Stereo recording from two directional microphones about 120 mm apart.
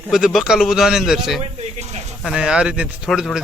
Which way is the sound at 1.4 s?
65° right (ahead or behind).